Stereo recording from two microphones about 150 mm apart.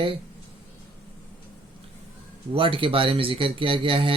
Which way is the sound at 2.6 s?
35° right (ahead or behind).